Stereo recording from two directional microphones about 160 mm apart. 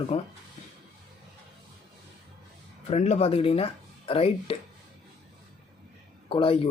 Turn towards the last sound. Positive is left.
turn(degrees=35)  # may be behind; listen again after turning